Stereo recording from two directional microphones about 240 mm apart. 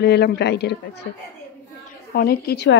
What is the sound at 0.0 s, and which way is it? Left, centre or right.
Speech, left.